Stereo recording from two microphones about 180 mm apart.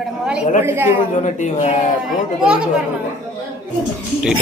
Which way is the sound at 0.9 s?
40° left (ahead or behind).